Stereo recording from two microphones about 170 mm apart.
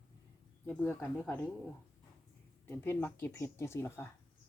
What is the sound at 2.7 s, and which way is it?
Speech, 10° left (ahead or behind).